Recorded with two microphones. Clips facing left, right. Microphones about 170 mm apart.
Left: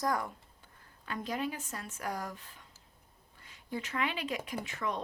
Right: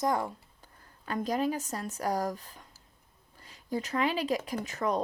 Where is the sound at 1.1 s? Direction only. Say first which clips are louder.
Right 6 dB; 40° right (ahead or behind).